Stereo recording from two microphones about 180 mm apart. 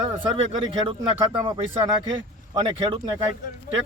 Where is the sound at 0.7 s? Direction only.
30° right (ahead or behind).